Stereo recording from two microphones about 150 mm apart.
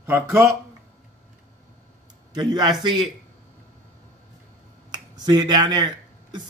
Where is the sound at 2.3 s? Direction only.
25° right (ahead or behind).